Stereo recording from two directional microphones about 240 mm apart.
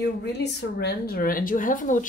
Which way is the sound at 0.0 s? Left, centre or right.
Left.